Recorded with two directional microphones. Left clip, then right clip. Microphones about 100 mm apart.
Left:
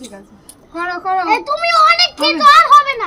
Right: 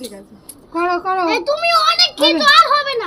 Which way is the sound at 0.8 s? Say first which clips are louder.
Even; 40° left (ahead or behind).